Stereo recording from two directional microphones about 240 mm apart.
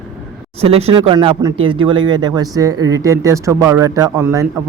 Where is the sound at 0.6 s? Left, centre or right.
Right.